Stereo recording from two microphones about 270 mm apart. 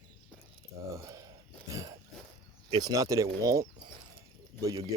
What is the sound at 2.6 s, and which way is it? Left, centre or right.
Speech, centre.